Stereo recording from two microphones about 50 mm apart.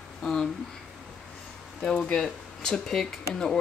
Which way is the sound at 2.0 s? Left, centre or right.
Centre.